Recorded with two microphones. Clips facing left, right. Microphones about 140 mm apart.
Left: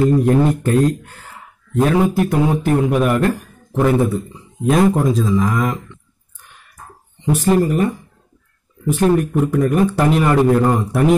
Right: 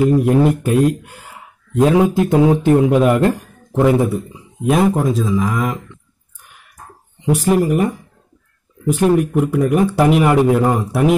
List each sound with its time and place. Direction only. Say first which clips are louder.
0.0 s a man's voice: right 1 dB; 10° right (ahead or behind)
3.9 s speech: right 1 dB; 10° right (ahead or behind)
7.2 s a man's voice: even; 10° right (ahead or behind)
8.9 s a man's voice: right 1 dB; 15° right (ahead or behind)